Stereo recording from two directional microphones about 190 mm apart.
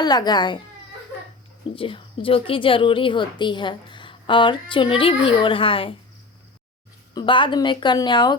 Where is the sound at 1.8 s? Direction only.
30° left (ahead or behind).